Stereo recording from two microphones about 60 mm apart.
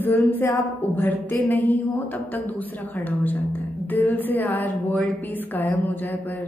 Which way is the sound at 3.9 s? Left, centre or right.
Left.